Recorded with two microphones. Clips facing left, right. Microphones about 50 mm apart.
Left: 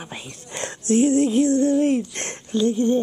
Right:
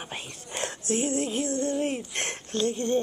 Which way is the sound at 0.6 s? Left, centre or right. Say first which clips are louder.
Left 6 dB; left.